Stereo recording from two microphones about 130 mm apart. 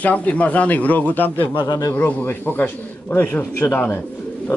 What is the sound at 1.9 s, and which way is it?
Speech, 15° left (ahead or behind).